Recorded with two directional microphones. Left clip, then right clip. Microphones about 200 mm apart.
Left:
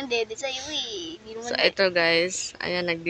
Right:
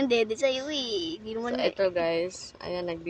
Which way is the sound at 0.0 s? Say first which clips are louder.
Right 3 dB; 50° right (ahead or behind).